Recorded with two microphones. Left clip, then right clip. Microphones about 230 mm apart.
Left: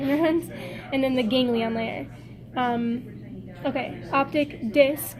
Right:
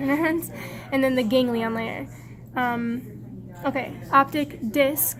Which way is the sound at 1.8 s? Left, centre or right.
Right.